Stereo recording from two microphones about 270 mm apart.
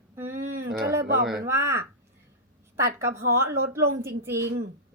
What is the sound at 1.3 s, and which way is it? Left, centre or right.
A woman's voice, centre.